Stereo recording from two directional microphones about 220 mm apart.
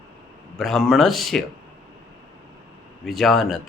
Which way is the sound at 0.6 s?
Centre (ahead or behind).